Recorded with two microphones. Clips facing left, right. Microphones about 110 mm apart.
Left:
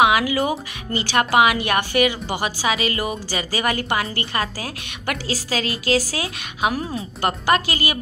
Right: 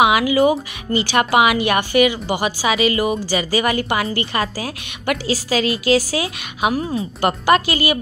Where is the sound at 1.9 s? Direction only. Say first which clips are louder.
Right 5 dB; 45° left (ahead or behind).